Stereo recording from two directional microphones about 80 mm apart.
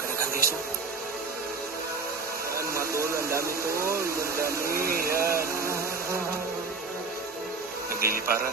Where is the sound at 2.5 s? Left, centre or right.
Right.